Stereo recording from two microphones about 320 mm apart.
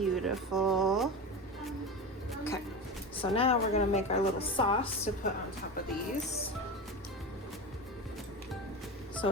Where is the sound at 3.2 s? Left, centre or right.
Centre.